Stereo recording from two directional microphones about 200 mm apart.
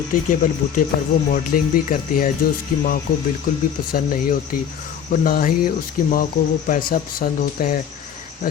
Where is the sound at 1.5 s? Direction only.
50° left (ahead or behind).